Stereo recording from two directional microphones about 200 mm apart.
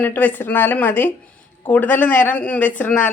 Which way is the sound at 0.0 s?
10° left (ahead or behind).